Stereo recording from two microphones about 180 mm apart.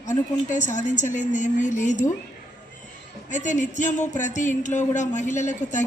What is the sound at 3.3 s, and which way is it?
Speech, 45° left (ahead or behind).